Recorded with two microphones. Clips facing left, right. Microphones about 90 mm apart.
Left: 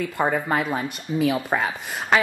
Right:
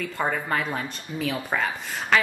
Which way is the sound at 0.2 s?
20° left (ahead or behind).